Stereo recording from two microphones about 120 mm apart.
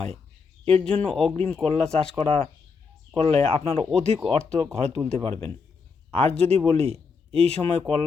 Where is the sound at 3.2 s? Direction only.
55° right (ahead or behind).